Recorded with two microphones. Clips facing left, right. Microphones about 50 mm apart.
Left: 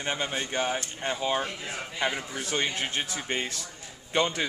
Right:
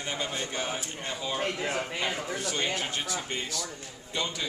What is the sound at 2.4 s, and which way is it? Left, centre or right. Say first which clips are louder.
Speech: left 4 dB; left.